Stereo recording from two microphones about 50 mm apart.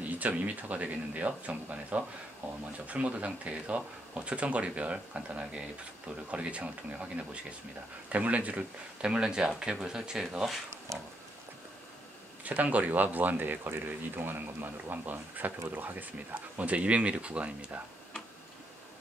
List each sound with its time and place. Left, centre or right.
0.0 s speech: right
12.4 s speech: right